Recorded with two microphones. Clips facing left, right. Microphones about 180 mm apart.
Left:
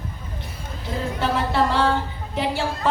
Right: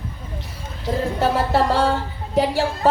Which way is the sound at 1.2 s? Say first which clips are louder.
Right 2 dB; 40° right (ahead or behind).